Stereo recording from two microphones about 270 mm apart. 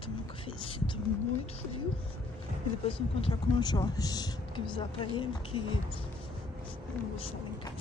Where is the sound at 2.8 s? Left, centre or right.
Centre.